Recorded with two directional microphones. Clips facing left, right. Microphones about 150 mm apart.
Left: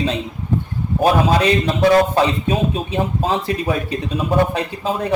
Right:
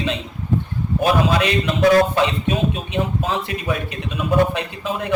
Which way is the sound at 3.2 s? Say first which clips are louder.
Left 4 dB; 35° left (ahead or behind).